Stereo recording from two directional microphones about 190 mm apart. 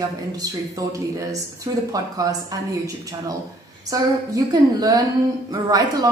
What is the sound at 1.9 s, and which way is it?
Speech, 20° right (ahead or behind).